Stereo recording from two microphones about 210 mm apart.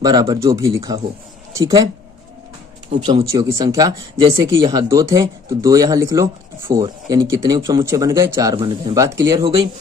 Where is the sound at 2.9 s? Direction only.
30° right (ahead or behind).